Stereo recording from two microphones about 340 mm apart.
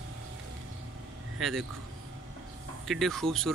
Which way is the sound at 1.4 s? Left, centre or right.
Centre.